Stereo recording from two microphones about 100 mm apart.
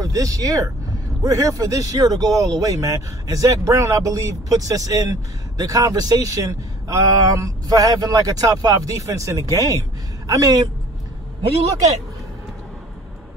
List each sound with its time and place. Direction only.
0.0 s speech: 35° right (ahead or behind)